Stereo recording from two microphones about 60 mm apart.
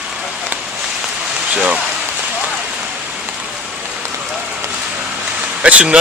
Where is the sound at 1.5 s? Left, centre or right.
Right.